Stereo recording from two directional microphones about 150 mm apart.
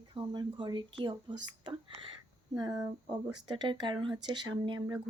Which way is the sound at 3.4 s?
30° right (ahead or behind).